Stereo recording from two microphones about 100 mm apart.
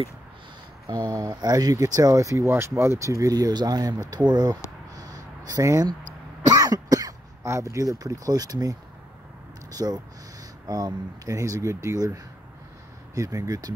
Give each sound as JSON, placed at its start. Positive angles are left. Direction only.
{"t": 0.8, "sound": "speech", "side_deg": -40}
{"t": 4.9, "sound": "a sound", "side_deg": -40}
{"t": 6.4, "sound": "speech", "side_deg": -40}